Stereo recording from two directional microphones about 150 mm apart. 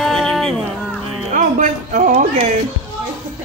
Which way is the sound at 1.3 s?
55° right (ahead or behind).